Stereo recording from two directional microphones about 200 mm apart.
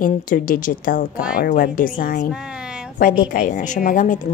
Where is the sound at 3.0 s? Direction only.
45° left (ahead or behind).